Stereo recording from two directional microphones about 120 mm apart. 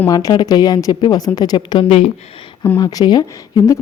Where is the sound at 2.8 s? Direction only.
30° left (ahead or behind).